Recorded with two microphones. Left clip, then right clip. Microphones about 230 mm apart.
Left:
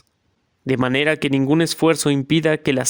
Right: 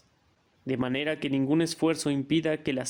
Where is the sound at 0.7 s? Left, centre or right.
Left.